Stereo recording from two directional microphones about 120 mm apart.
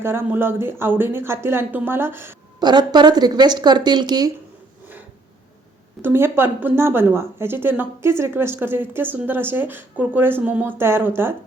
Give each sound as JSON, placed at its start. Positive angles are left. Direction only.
{"t": 0.0, "sound": "speech", "side_deg": -20}
{"t": 2.6, "sound": "speech", "side_deg": -35}
{"t": 6.0, "sound": "a woman's voice", "side_deg": -20}